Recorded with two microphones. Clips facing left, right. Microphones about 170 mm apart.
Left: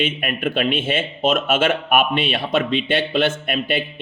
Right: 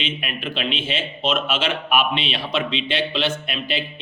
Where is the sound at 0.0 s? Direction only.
50° left (ahead or behind).